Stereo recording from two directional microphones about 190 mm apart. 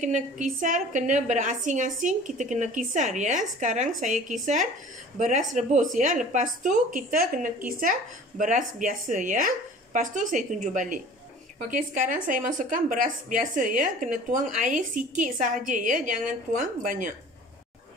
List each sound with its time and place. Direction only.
0.0 s a woman's voice: 40° right (ahead or behind)